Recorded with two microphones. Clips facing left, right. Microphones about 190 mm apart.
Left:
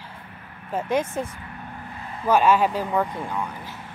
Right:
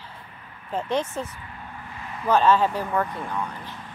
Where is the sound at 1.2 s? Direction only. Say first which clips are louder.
Left 3 dB; 50° left (ahead or behind).